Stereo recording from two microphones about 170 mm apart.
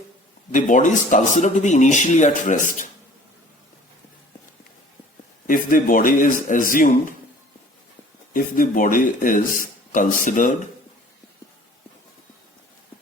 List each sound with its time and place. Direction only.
0.5 s speech: 50° left (ahead or behind)
5.5 s speech: 55° left (ahead or behind)
8.3 s speech: 55° left (ahead or behind)